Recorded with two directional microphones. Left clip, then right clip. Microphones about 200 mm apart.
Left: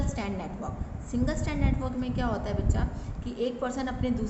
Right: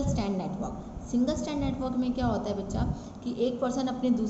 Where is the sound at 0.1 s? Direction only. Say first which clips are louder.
Right 3 dB; 20° left (ahead or behind).